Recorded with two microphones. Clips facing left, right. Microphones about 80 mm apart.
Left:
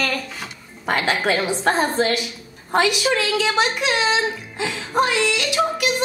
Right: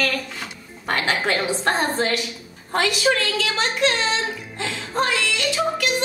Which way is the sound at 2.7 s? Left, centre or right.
Centre.